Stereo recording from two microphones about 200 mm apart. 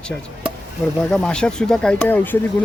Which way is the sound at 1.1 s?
5° left (ahead or behind).